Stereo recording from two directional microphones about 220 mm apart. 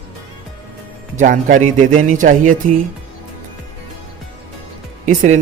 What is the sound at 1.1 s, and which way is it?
Speech, 35° right (ahead or behind).